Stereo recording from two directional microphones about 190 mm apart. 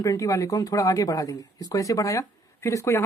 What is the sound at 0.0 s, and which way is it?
Speech, 15° left (ahead or behind).